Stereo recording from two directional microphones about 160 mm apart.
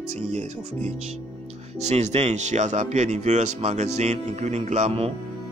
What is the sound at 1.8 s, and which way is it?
Speech, 45° right (ahead or behind).